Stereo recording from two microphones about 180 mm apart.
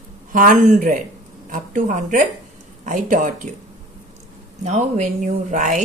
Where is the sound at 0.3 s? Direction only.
50° right (ahead or behind).